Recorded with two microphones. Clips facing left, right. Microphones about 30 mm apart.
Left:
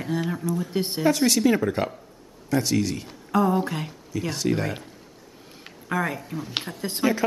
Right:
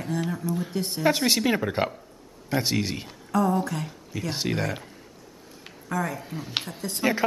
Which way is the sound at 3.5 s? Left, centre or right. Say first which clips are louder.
Left 2 dB; left.